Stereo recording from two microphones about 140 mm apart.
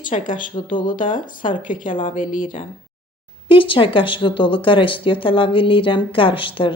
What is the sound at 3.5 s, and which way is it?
A woman's voice, 40° left (ahead or behind).